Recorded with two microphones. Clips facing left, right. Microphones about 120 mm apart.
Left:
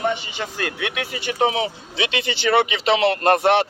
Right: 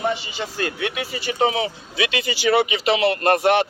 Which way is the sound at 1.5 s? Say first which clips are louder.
Even; 25° left (ahead or behind).